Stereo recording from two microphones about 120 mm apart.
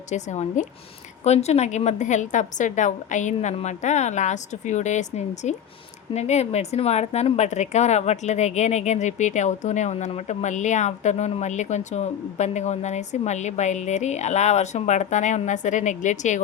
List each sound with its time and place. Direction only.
0.1 s speech: 85° left
1.2 s a woman's voice: 65° left (ahead or behind); by 16.4 s 90° left